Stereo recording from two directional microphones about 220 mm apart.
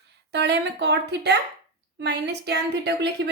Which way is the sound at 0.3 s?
50° right (ahead or behind).